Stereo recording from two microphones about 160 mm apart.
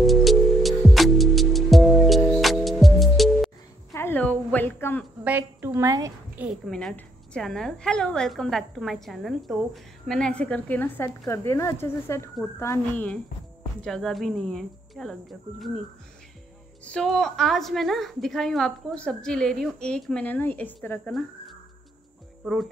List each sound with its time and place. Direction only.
0.0 s music: centre (ahead or behind)
3.9 s a sound: 15° left (ahead or behind)
5.2 s a woman's voice: 10° right (ahead or behind)
6.3 s a woman's voice: 5° right (ahead or behind)
16.8 s a woman's voice: 5° left (ahead or behind)
22.4 s speech: centre (ahead or behind)